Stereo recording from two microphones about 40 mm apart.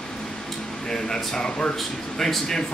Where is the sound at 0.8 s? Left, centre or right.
Centre.